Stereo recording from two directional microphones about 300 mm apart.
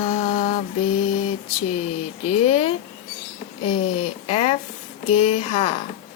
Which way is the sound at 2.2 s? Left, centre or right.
Centre.